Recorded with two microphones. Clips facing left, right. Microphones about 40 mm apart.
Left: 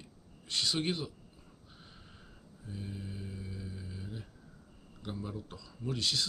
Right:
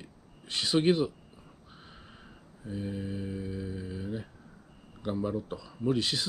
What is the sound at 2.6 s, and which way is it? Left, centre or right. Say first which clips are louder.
Mantra: right 8 dB; right.